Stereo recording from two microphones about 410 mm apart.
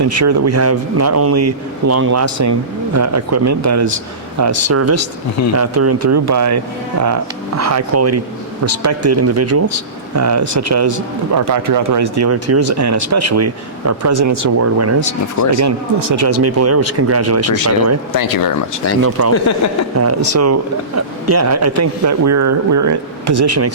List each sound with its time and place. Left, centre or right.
0.0 s speech: right
15.5 s speech: right
16.4 s speech: right
18.1 s speech: left
19.3 s speech: left
20.0 s speech: right